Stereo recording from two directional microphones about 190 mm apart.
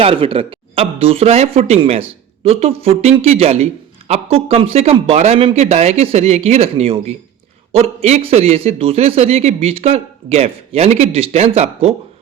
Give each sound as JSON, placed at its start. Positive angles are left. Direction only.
{"t": 0.0, "sound": "a man's voice", "side_deg": -30}